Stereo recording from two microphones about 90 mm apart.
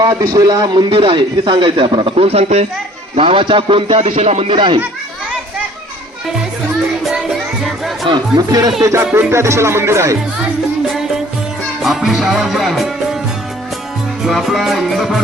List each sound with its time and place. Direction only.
0.0 s a man's voice: 45° right (ahead or behind)
0.9 s a man's voice: 80° right
7.1 s music: 5° right (ahead or behind)
8.0 s speech: 55° right (ahead or behind)
8.4 s a man's voice: 45° right (ahead or behind)
11.8 s music: 5° right (ahead or behind)
14.3 s music: centre (ahead or behind)